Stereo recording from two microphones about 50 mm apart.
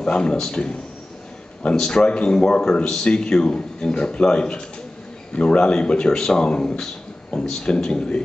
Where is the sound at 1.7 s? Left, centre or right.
Centre.